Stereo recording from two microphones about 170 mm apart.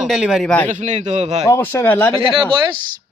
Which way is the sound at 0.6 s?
45° right (ahead or behind).